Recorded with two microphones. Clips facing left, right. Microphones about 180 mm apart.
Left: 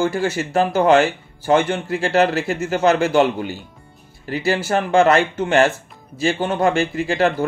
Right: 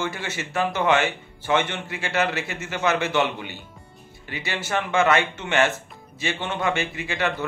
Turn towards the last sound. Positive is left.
turn(degrees=40)  # may be behind; listen again after turning